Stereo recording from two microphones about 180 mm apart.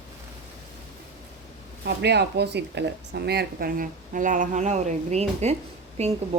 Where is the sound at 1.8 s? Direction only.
70° right (ahead or behind).